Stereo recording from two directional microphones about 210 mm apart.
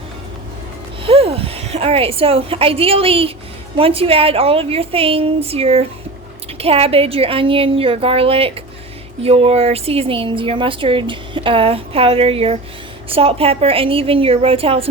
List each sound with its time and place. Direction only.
1.0 s speech: 25° right (ahead or behind)